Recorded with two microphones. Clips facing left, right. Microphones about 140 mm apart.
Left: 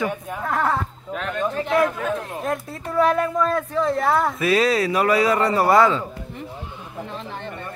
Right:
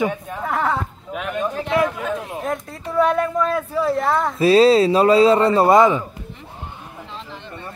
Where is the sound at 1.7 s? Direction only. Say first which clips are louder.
Even; centre (ahead or behind).